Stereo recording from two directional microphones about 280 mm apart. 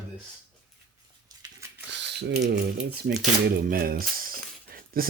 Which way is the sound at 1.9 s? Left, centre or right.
Right.